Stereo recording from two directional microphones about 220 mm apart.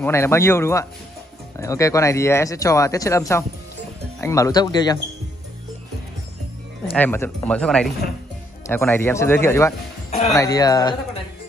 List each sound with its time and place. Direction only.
0.0 s speech: 10° left (ahead or behind)
6.9 s speech: 10° left (ahead or behind)